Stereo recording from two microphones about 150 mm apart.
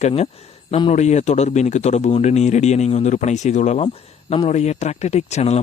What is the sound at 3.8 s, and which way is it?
Speech, 35° left (ahead or behind).